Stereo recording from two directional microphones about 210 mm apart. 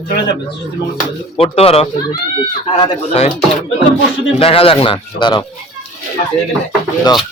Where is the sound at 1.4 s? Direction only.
30° left (ahead or behind).